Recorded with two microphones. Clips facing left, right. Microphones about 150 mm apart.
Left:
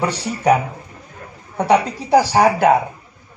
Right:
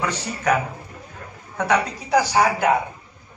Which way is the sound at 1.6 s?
35° left (ahead or behind).